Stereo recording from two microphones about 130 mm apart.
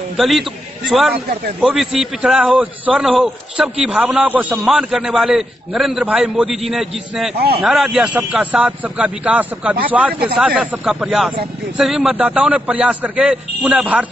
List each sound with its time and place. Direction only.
0.2 s a man's voice: centre (ahead or behind)